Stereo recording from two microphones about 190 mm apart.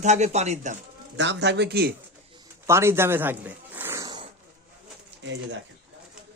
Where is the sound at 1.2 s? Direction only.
70° right (ahead or behind).